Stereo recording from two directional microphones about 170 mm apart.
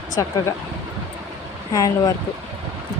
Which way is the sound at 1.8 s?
20° left (ahead or behind).